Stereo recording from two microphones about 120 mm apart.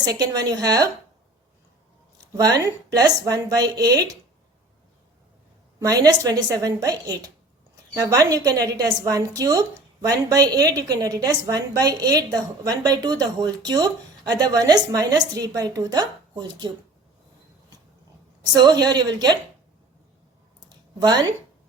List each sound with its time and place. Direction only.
0.0 s a woman's voice: 30° right (ahead or behind)
2.3 s a woman's voice: 30° right (ahead or behind)
5.8 s a woman's voice: 30° right (ahead or behind)
18.5 s a woman's voice: 35° right (ahead or behind)
21.0 s a woman's voice: 35° right (ahead or behind)